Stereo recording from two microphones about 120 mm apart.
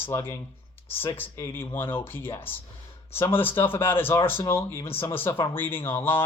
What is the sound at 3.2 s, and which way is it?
Speech, 45° left (ahead or behind).